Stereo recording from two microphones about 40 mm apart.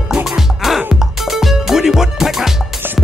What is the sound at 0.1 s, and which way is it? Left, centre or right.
Music, centre.